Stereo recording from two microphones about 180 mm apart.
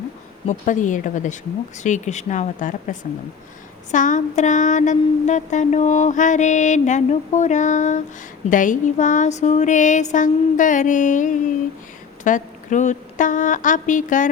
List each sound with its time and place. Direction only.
0.4 s speech: 45° left (ahead or behind)
3.9 s mantra: 45° left (ahead or behind)
8.4 s speech: 45° left (ahead or behind)